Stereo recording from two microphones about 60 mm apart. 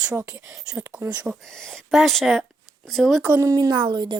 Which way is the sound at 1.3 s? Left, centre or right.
Centre.